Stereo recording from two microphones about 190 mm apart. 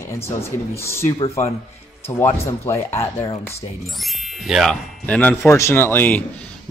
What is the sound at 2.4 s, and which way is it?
A man's voice, 15° left (ahead or behind).